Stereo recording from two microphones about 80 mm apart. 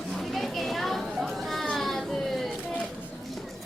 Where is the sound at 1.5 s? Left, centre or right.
Centre.